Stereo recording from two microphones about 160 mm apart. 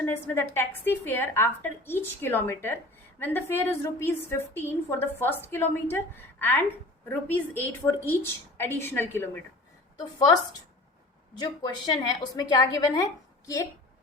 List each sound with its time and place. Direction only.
0.0 s a woman's voice: 15° left (ahead or behind)
10.2 s a woman's voice: 25° left (ahead or behind)